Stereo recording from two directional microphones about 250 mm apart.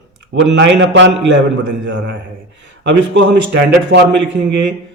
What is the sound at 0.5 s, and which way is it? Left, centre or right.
Speech, right.